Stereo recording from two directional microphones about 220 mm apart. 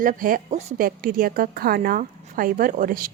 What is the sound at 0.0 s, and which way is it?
A woman's voice, 40° right (ahead or behind).